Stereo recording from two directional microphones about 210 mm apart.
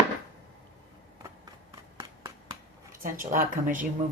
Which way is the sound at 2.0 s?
20° right (ahead or behind).